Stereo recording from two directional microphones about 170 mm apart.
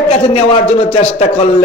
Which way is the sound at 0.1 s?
40° left (ahead or behind).